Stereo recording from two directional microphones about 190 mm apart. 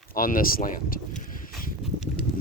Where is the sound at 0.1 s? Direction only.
45° left (ahead or behind).